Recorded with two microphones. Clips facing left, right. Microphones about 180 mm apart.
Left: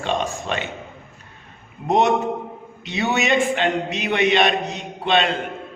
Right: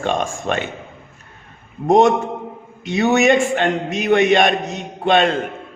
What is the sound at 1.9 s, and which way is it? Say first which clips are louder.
A man's voice: right 5 dB; 45° right (ahead or behind).